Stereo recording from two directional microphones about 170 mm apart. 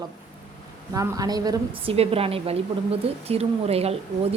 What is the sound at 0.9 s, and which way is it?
A woman's voice, 20° right (ahead or behind).